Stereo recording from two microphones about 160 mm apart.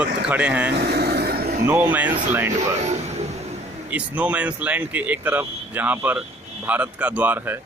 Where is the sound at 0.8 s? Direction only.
90° right; by 1.6 s 70° right (ahead or behind).